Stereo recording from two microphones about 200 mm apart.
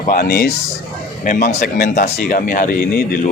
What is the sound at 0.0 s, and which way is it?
Speech, 45° left (ahead or behind).